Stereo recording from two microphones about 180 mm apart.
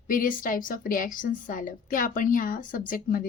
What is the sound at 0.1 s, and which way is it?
A woman's voice, 50° left (ahead or behind).